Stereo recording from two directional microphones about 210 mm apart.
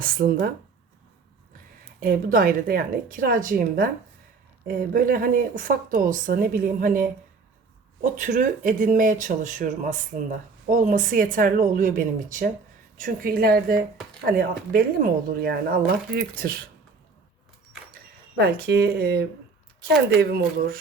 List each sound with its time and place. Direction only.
0.0 s speech: 45° right (ahead or behind)
2.0 s speech: 40° right (ahead or behind)
17.9 s speech: 45° right (ahead or behind)